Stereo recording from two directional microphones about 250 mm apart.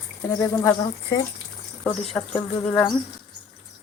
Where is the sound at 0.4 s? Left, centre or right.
Centre.